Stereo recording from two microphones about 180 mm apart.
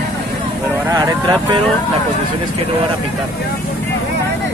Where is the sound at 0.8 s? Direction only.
20° right (ahead or behind).